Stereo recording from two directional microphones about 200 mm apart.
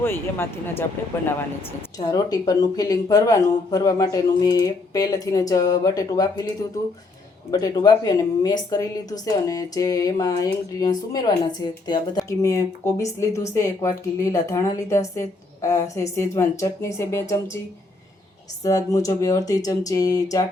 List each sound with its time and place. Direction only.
0.0 s speech: 10° left (ahead or behind)
2.0 s speech: 20° left (ahead or behind)
18.6 s speech: 15° left (ahead or behind)